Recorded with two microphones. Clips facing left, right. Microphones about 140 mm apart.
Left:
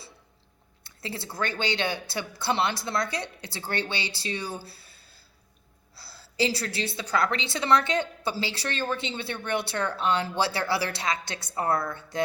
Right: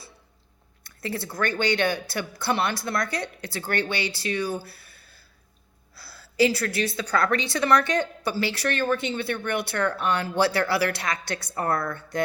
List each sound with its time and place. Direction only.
0.9 s a woman's voice: 25° left (ahead or behind)
4.6 s a sound: 25° left (ahead or behind)
6.0 s a woman's voice: 25° left (ahead or behind)